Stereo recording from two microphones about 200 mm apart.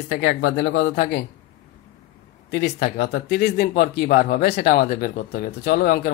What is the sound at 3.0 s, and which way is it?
Speech, 55° left (ahead or behind).